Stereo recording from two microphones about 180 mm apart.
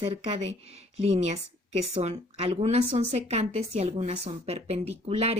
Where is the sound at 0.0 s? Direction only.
30° right (ahead or behind).